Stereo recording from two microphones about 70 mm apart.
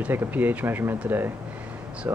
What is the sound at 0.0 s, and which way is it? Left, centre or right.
Speech, right.